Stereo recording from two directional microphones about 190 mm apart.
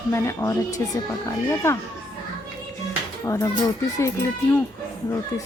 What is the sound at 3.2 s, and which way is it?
Speech, 15° left (ahead or behind).